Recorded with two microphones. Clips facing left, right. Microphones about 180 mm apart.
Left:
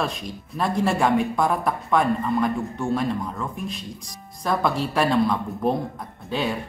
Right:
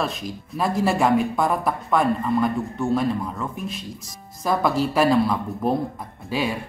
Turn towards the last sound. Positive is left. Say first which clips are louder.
# right 1 dB
turn(degrees=-5)  # may be behind; listen again after turning